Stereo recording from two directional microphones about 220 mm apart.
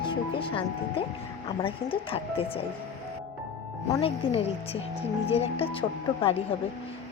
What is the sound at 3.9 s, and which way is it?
A woman's voice, 25° left (ahead or behind).